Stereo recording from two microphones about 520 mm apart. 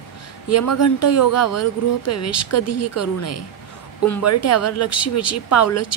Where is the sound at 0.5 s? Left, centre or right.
Left.